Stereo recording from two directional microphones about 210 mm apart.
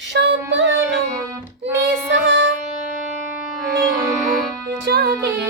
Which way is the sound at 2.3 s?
65° right (ahead or behind).